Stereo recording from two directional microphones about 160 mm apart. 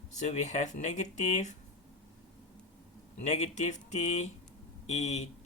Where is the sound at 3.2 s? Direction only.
45° left (ahead or behind).